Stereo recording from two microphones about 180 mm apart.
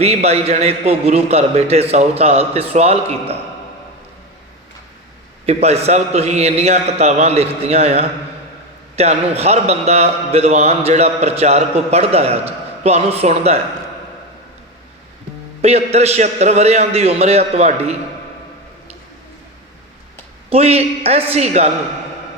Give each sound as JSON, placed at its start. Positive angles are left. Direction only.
{"t": 0.0, "sound": "a man's voice", "side_deg": -35}
{"t": 5.5, "sound": "a man's voice", "side_deg": -35}
{"t": 15.6, "sound": "a man's voice", "side_deg": -35}
{"t": 20.5, "sound": "a man's voice", "side_deg": -35}